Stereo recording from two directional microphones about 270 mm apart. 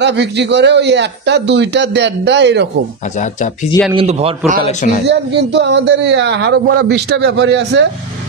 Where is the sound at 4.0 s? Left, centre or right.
Right.